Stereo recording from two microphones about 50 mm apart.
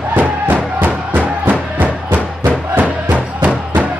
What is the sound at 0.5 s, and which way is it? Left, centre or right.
Music, right.